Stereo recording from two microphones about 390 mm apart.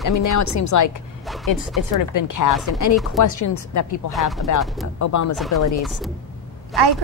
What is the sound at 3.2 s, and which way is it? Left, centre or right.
Speech, left.